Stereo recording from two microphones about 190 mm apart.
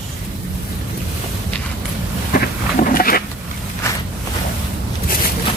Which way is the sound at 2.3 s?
45° left (ahead or behind).